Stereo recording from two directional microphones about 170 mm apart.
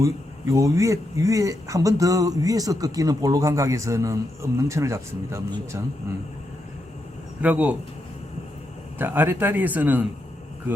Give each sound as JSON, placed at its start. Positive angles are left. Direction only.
{"t": 0.5, "sound": "speech", "side_deg": -20}
{"t": 7.4, "sound": "a man's voice", "side_deg": -10}
{"t": 9.0, "sound": "a man's voice", "side_deg": -10}